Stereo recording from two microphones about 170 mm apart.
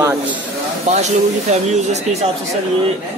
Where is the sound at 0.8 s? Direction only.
45° right (ahead or behind).